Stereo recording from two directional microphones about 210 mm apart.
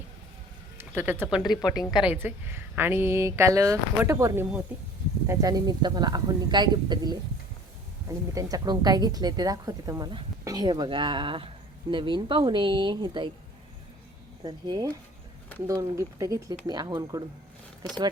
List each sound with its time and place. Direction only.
0.8 s speech: 10° right (ahead or behind)
1.4 s speech: 15° left (ahead or behind)
2.0 s a woman's voice: 10° right (ahead or behind)
8.4 s a woman's voice: 15° right (ahead or behind)
14.4 s a woman's voice: 20° right (ahead or behind)